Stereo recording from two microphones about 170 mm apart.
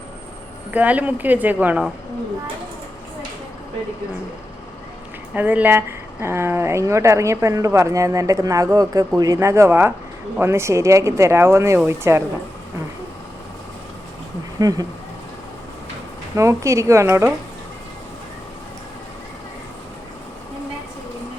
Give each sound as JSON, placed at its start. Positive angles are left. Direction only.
{"t": 0.7, "sound": "speech", "side_deg": -10}
{"t": 5.3, "sound": "speech", "side_deg": -10}
{"t": 14.6, "sound": "speech", "side_deg": -20}
{"t": 16.3, "sound": "speech", "side_deg": -15}